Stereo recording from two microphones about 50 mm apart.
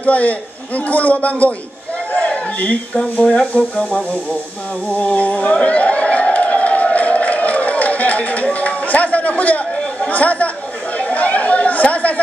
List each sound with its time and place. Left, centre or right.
0.0 s a man's voice: left
2.1 s a sound: left
3.0 s speech: centre
3.5 s a man's voice: left
5.7 s a sound: left
8.5 s a man's voice: left
11.0 s chatter: left